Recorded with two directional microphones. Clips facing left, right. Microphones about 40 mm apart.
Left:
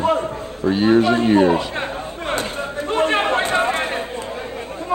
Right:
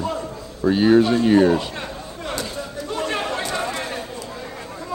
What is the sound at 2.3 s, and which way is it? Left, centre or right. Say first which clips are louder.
Chatter: left 4 dB; left.